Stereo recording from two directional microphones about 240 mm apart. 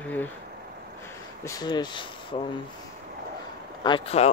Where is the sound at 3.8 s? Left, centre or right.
Left.